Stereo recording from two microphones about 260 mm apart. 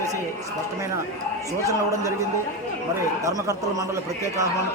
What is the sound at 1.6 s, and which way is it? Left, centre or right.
Speech, centre.